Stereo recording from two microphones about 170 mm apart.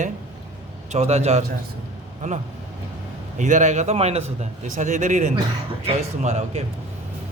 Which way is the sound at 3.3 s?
45° right (ahead or behind).